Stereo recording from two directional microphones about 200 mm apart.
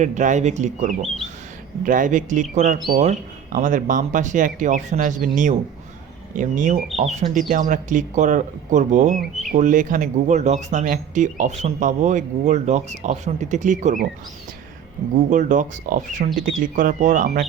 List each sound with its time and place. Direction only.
0.0 s speech: 40° right (ahead or behind)
15.3 s speech: 40° right (ahead or behind)